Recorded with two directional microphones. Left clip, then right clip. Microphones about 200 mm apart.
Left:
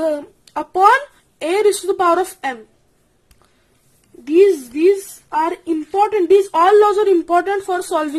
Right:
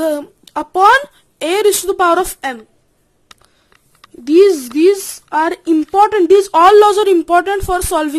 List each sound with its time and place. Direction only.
0.0 s speech: 20° right (ahead or behind)
4.4 s a woman's voice: 40° right (ahead or behind)
6.5 s a woman's voice: 25° right (ahead or behind)